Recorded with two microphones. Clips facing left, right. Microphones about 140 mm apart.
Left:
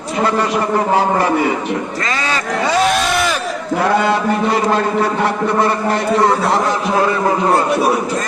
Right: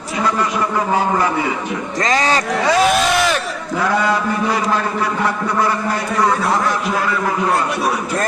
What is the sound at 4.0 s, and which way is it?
A man's voice, 25° left (ahead or behind).